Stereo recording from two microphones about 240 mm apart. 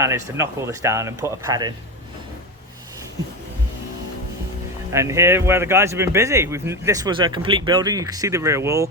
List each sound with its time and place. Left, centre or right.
0.3 s speech: centre
4.9 s speech: centre